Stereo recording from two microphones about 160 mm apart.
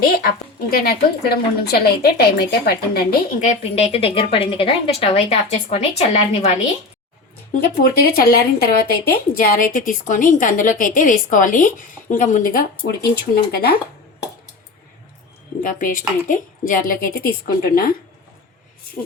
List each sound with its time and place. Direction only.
0.0 s a woman's voice: 75° left (ahead or behind)
3.4 s speech: 40° left (ahead or behind)
7.5 s speech: 70° left (ahead or behind)
13.3 s a woman's voice: 75° left (ahead or behind)
15.6 s speech: 60° left (ahead or behind)